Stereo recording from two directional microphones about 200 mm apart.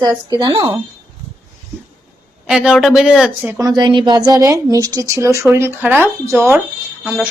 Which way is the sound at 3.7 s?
20° right (ahead or behind).